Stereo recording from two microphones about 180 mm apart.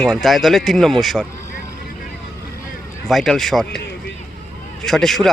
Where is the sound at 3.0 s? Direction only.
Centre (ahead or behind).